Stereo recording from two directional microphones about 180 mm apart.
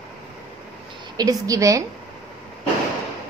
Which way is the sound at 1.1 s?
20° right (ahead or behind).